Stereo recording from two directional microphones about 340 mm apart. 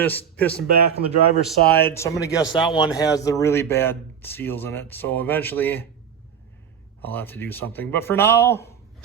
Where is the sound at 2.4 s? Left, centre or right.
Centre.